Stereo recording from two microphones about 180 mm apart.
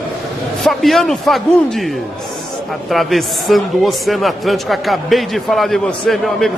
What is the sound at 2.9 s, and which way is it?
A man's voice, centre (ahead or behind).